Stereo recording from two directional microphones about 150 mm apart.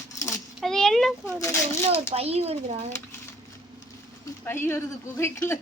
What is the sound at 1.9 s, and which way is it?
Speech, 40° right (ahead or behind).